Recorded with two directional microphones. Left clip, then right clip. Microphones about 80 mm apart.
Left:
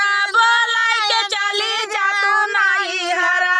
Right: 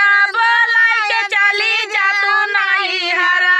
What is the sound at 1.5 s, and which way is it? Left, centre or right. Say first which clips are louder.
Child singing: right 5 dB; right.